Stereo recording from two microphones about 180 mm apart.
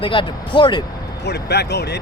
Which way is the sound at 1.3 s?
65° left (ahead or behind).